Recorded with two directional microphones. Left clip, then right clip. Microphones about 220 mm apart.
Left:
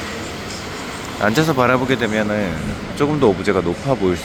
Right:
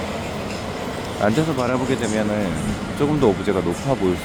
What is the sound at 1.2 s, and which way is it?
Speech, 5° right (ahead or behind).